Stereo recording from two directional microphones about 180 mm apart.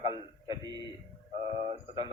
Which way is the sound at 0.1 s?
20° right (ahead or behind).